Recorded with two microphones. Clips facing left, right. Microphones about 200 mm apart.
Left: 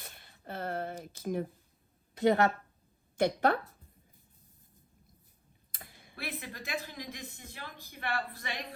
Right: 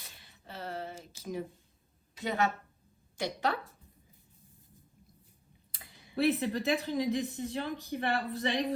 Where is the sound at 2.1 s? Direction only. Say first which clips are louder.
Left 6 dB; 55° left (ahead or behind).